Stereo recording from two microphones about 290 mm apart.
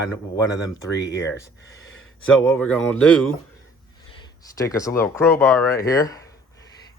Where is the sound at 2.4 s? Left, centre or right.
Centre.